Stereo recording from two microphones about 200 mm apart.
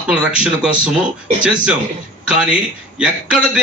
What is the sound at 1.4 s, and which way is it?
A man's voice, 5° right (ahead or behind).